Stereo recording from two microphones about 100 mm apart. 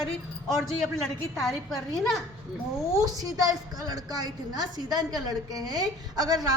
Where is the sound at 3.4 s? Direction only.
40° right (ahead or behind).